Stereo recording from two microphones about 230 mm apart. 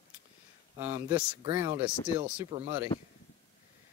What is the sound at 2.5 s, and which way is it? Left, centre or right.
Speech, right.